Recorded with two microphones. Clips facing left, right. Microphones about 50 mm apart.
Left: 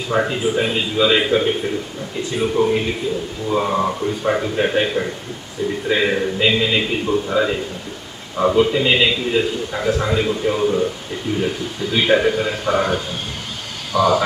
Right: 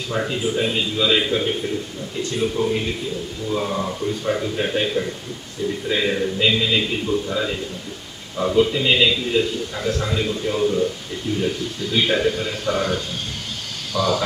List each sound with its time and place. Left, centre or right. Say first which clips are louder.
0.1 s a man's voice: left 4 dB; left
8.5 s a man's voice: even; centre